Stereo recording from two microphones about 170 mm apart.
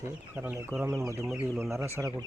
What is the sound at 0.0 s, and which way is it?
Speech, 15° right (ahead or behind).